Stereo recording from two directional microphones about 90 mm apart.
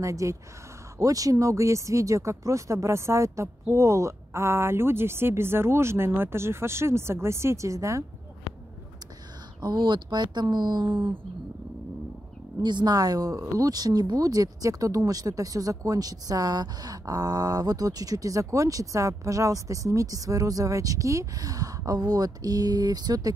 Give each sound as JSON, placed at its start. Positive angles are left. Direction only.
{"t": 0.0, "sound": "speech", "side_deg": -35}
{"t": 9.6, "sound": "speech", "side_deg": -55}
{"t": 12.6, "sound": "speech", "side_deg": -55}